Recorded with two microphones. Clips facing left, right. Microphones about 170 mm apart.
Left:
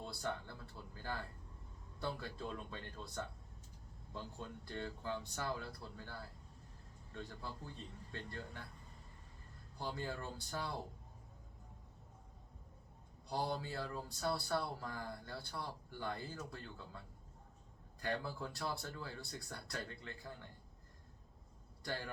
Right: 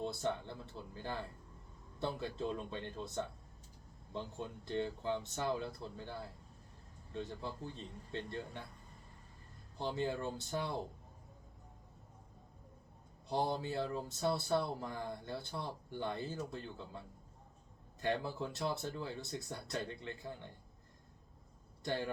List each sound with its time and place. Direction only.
0.0 s speech: 25° right (ahead or behind)
9.7 s speech: 25° right (ahead or behind)
13.2 s speech: 20° right (ahead or behind)
18.0 s speech: 20° right (ahead or behind)
21.8 s speech: 20° right (ahead or behind)